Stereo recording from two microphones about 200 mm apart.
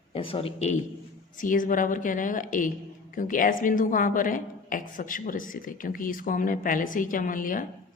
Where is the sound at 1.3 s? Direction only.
40° left (ahead or behind).